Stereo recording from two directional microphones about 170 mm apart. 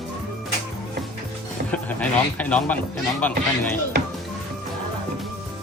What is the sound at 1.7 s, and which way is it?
Speech, 10° left (ahead or behind).